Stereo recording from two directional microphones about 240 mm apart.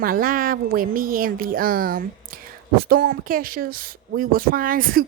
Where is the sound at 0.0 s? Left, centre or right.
Right.